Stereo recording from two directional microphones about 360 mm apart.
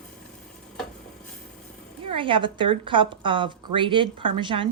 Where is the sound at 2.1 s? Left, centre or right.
Centre.